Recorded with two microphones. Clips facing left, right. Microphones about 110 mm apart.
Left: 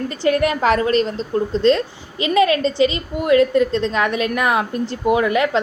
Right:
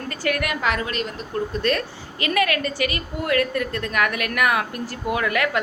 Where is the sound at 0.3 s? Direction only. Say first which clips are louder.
Left 7 dB; 30° left (ahead or behind).